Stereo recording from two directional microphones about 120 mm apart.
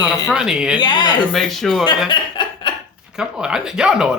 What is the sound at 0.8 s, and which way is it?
Speech, 40° left (ahead or behind).